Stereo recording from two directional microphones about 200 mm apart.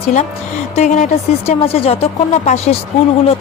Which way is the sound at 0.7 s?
35° left (ahead or behind).